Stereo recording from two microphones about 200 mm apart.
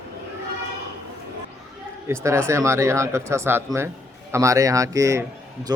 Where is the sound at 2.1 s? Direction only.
15° right (ahead or behind).